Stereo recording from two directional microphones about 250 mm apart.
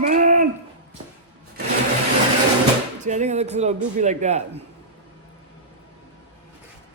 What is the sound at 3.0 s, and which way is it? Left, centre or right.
Speech, right.